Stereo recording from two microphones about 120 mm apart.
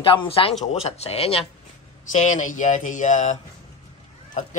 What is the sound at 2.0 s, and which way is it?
Speech, 90° left.